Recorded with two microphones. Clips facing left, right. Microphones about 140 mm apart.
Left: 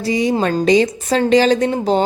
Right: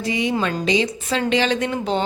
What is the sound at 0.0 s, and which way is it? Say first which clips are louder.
Speech: left 5 dB; 35° left (ahead or behind).